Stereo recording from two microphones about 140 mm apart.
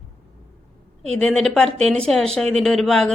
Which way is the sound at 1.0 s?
5° left (ahead or behind).